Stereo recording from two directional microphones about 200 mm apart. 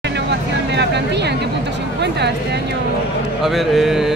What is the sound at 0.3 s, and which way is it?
Vehicle, 60° right (ahead or behind).